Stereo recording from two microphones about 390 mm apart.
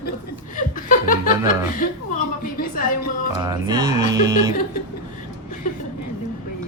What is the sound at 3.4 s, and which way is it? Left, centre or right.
Speech, centre.